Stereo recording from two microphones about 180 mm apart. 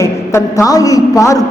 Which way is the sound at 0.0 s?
15° left (ahead or behind).